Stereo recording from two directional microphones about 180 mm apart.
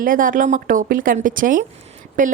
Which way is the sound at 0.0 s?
50° right (ahead or behind).